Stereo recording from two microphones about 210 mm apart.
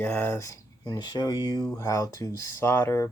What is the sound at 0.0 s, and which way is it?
Speech, 10° left (ahead or behind).